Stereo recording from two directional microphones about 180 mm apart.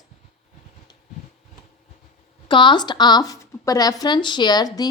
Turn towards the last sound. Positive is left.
turn(degrees=20)  # may be behind; listen again after turning